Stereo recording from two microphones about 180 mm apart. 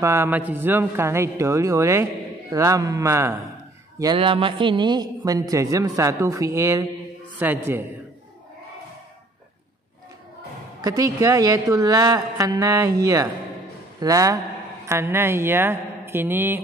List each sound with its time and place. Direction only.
0.0 s a man's voice: 15° right (ahead or behind)
4.0 s a man's voice: 25° right (ahead or behind)
10.8 s a man's voice: 20° right (ahead or behind)